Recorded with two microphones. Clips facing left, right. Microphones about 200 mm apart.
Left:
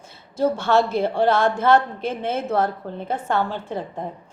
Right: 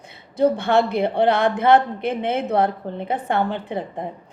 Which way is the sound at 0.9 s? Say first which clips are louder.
Right 1 dB; 20° right (ahead or behind).